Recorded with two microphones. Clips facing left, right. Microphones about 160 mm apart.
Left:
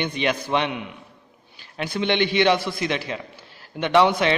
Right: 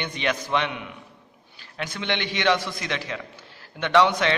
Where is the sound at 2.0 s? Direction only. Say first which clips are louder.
Left 8 dB; 15° left (ahead or behind).